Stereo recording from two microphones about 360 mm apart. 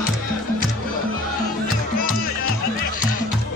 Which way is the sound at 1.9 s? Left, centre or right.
Left.